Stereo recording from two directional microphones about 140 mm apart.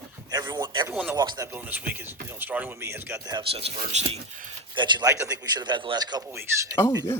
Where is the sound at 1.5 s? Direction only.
10° right (ahead or behind).